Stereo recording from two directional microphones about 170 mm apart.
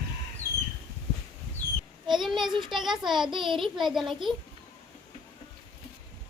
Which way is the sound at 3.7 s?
Centre (ahead or behind).